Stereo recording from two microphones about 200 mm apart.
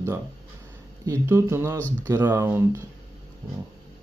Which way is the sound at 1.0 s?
15° right (ahead or behind).